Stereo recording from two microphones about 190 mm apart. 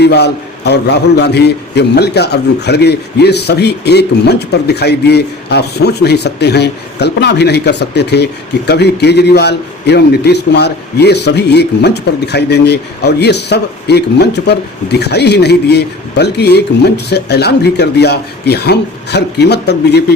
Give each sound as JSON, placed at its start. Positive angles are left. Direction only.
{"t": 0.0, "sound": "a man's voice", "side_deg": 60}